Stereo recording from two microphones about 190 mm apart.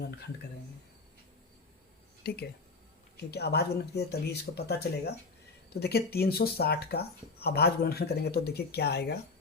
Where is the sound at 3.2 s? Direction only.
60° left (ahead or behind).